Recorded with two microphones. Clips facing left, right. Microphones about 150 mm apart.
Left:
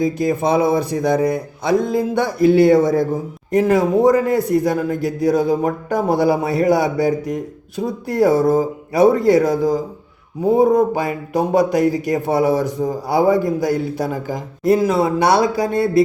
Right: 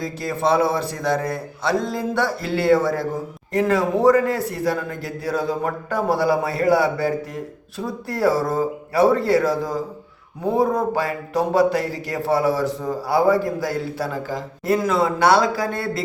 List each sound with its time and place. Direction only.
0.0 s speech: 15° left (ahead or behind)